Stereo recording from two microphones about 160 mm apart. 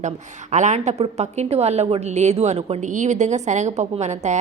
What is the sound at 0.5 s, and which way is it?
A woman's voice, 45° right (ahead or behind).